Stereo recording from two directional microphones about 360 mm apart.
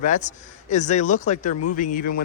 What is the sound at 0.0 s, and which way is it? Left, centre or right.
A man's voice, centre.